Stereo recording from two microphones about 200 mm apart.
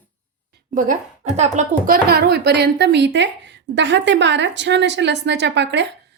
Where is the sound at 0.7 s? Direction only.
40° right (ahead or behind).